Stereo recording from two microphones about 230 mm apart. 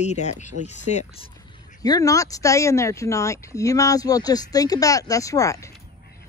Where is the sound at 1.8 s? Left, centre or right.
Centre.